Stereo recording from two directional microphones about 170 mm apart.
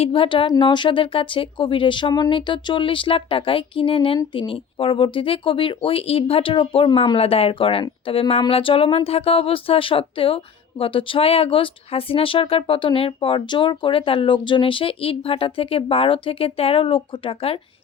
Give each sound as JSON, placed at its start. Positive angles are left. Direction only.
{"t": 0.0, "sound": "speech", "side_deg": 30}